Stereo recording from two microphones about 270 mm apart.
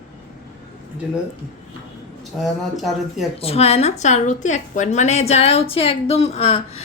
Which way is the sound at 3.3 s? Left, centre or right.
Left.